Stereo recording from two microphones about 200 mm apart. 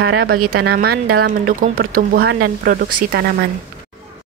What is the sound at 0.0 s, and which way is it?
A woman's voice, 50° right (ahead or behind).